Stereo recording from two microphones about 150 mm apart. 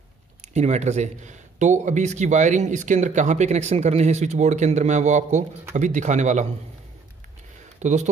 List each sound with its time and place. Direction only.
0.5 s speech: 50° right (ahead or behind)
7.8 s speech: 50° right (ahead or behind)